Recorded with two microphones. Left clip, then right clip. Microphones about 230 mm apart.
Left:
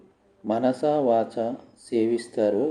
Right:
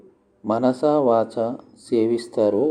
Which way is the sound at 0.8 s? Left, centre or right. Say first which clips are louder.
Right 4 dB; centre.